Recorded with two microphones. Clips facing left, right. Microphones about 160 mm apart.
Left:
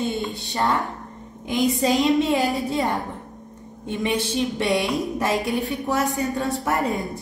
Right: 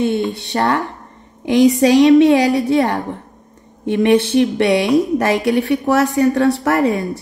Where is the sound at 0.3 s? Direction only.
70° right (ahead or behind).